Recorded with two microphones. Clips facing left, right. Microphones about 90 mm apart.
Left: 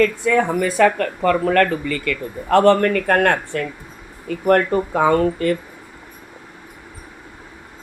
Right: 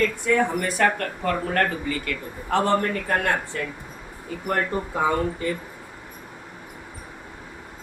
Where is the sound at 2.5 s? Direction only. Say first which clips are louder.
Left 8 dB; 75° left (ahead or behind); by 3.7 s 60° left (ahead or behind).